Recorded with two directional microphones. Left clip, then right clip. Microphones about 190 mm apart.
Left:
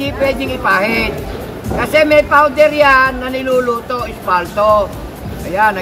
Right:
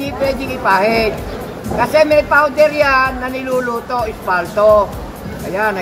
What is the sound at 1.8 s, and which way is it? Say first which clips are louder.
Speech: left 1 dB; 25° left (ahead or behind).